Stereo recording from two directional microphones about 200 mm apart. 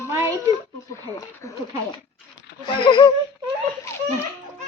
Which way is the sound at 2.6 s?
25° left (ahead or behind).